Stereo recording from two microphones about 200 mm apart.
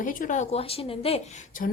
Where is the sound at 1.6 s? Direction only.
40° left (ahead or behind).